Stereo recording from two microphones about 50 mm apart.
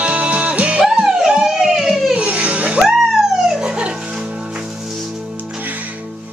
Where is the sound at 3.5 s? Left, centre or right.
Centre.